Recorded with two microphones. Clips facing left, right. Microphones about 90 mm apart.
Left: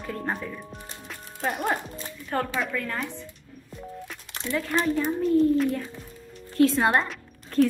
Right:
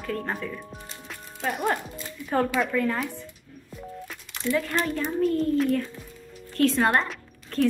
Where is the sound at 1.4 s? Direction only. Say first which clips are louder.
Even; centre (ahead or behind).